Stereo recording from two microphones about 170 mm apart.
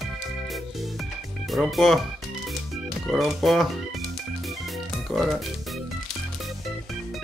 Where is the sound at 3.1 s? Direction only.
Centre (ahead or behind).